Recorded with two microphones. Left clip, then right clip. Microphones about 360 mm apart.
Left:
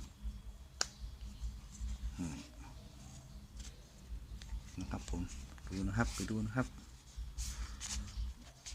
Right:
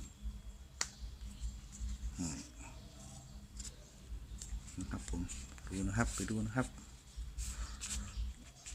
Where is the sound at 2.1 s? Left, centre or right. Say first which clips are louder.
Right 2 dB; centre.